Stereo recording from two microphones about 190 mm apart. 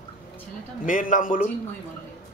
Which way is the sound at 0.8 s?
45° left (ahead or behind).